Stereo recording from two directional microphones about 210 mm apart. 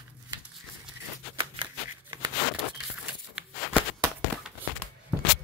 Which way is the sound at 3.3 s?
5° right (ahead or behind).